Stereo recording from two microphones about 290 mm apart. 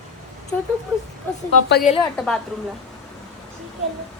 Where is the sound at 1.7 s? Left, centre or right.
Left.